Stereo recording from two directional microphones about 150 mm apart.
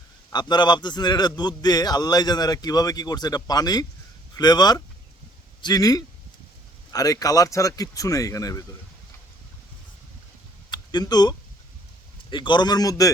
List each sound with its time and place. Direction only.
0.3 s a man's voice: 30° left (ahead or behind)
10.7 s a sound: 30° left (ahead or behind)
12.3 s a man's voice: 30° left (ahead or behind)